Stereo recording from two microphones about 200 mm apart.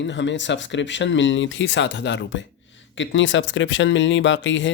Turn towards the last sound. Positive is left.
turn(degrees=65)  # may be behind; listen again after turning